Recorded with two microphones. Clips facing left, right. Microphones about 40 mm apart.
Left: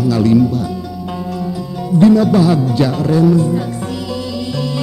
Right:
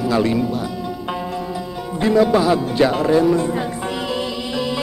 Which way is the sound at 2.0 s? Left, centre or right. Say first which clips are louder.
Left 5 dB; right.